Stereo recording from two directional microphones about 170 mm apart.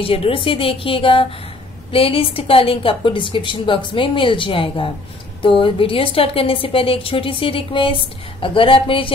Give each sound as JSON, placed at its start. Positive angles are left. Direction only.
{"t": 0.0, "sound": "a woman's voice", "side_deg": 35}